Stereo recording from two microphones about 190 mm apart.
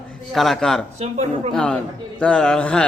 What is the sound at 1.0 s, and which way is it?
Speech, 35° right (ahead or behind).